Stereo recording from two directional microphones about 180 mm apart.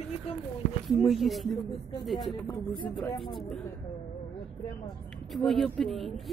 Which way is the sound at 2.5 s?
25° left (ahead or behind).